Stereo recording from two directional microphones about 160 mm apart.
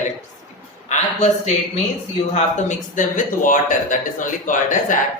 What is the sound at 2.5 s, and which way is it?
A man's voice, 50° left (ahead or behind).